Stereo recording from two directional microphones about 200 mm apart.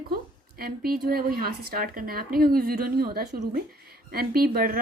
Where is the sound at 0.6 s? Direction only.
50° right (ahead or behind).